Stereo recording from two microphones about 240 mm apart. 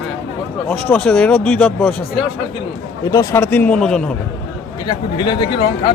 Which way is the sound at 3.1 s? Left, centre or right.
Centre.